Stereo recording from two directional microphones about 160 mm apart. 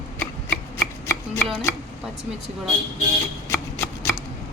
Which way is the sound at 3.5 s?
15° left (ahead or behind).